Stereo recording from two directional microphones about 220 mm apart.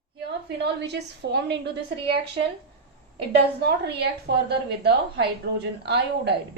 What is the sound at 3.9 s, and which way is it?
A woman's voice, 50° right (ahead or behind).